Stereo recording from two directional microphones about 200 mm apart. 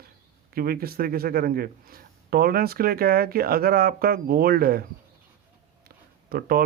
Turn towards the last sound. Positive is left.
turn(degrees=-50)  # may be behind; listen again after turning